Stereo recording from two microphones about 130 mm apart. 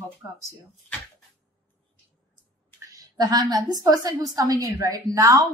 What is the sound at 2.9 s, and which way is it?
A woman's voice, 30° right (ahead or behind).